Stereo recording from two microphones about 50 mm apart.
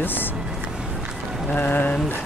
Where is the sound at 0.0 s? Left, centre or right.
Left.